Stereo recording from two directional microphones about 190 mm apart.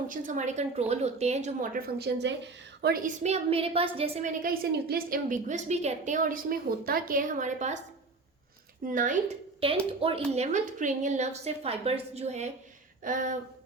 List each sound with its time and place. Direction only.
0.1 s a woman's voice: 45° right (ahead or behind)
4.4 s a woman's voice: 50° right (ahead or behind)
8.9 s a woman's voice: 45° right (ahead or behind)
9.6 s a woman's voice: 30° right (ahead or behind)